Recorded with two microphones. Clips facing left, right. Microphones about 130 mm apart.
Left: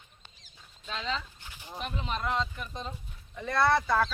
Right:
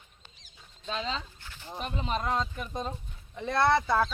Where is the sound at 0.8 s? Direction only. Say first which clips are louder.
Right 1 dB; 25° right (ahead or behind).